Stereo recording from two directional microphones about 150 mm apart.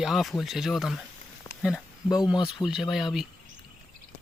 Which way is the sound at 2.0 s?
25° left (ahead or behind).